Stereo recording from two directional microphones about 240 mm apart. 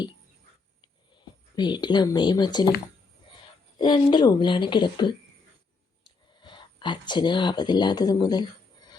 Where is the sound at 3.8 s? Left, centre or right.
Centre.